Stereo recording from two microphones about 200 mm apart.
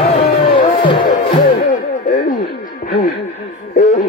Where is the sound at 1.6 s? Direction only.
40° left (ahead or behind).